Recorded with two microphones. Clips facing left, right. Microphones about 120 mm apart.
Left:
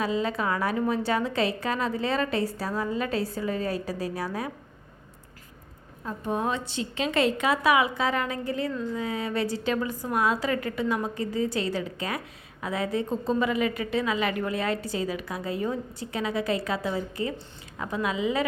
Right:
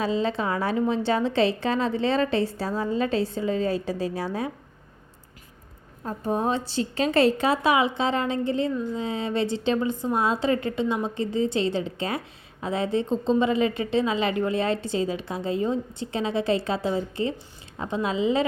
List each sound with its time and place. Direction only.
0.0 s a woman's voice: 30° right (ahead or behind)
6.1 s a woman's voice: 35° right (ahead or behind)